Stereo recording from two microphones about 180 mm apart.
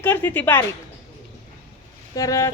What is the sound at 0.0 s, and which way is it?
Speech, 10° left (ahead or behind).